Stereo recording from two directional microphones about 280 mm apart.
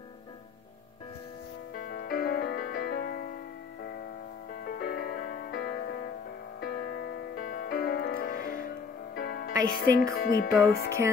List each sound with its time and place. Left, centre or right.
1.8 s music: left
4.6 s music: left
7.3 s music: left